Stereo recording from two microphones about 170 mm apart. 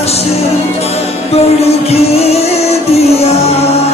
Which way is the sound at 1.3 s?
35° left (ahead or behind).